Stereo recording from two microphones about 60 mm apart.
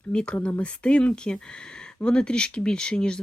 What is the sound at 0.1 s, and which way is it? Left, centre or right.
Speech, centre.